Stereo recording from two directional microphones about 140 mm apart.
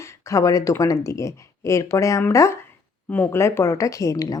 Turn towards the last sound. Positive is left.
turn(degrees=25)  # may be behind; listen again after turning